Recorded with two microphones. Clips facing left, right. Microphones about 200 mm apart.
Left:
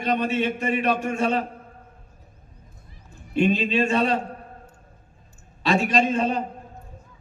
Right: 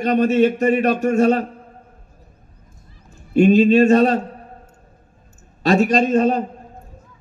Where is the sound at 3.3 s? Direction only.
45° right (ahead or behind).